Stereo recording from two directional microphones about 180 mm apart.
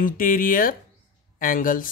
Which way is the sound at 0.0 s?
50° left (ahead or behind).